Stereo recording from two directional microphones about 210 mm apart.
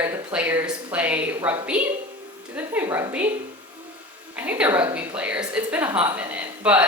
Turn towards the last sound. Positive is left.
turn(degrees=-5)  # may be behind; listen again after turning